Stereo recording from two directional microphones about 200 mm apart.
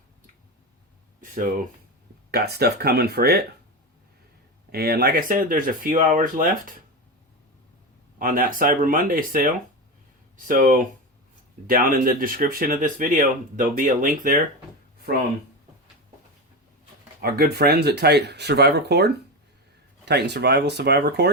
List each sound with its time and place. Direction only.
1.2 s speech: 40° right (ahead or behind)
2.3 s speech: 50° right (ahead or behind)
4.7 s speech: 50° right (ahead or behind)
8.2 s speech: 45° right (ahead or behind)
17.2 s speech: 50° right (ahead or behind)